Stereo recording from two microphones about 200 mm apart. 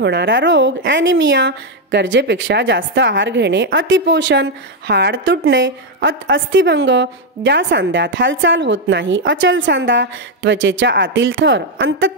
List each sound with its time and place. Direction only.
0.0 s speech: 60° right (ahead or behind)